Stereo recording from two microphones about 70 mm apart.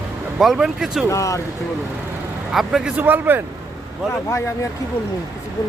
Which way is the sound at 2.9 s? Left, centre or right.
Right.